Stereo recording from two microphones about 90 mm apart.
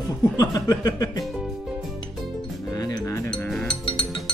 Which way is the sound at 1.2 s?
5° right (ahead or behind).